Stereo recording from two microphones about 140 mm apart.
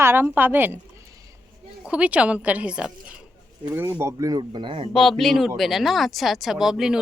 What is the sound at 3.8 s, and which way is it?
Speech, 15° right (ahead or behind).